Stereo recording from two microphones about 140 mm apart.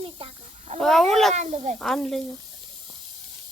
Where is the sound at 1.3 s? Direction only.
55° right (ahead or behind).